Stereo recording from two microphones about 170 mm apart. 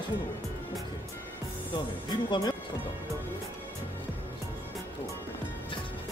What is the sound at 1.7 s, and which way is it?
Speech, 25° left (ahead or behind).